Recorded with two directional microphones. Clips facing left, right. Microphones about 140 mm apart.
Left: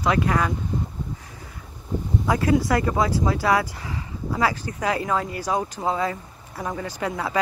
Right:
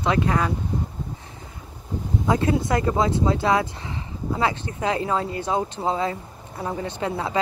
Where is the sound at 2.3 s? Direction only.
25° right (ahead or behind).